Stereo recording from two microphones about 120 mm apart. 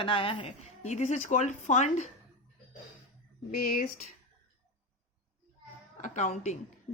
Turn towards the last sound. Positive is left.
turn(degrees=80)